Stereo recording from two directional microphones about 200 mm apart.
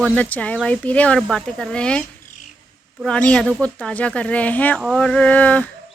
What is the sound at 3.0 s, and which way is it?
Speech, 5° left (ahead or behind).